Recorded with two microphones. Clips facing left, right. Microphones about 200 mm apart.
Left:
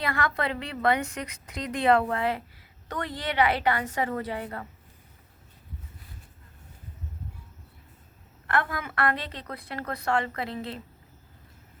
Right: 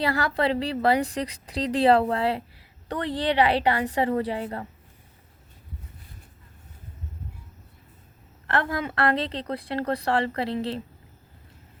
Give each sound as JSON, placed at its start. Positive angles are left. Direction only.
{"t": 0.0, "sound": "a woman's voice", "side_deg": -30}
{"t": 8.5, "sound": "a woman's voice", "side_deg": -30}